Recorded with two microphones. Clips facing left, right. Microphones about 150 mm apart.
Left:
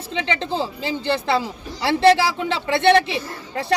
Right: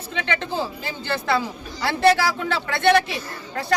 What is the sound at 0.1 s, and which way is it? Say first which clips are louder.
Speech: left 2 dB; 20° left (ahead or behind).